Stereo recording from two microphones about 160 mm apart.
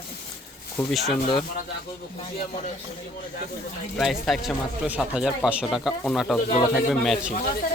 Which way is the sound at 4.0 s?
Centre (ahead or behind).